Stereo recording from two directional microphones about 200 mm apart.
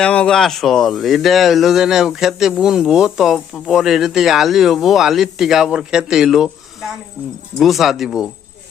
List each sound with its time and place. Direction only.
0.0 s speech: 5° left (ahead or behind)
7.6 s speech: centre (ahead or behind)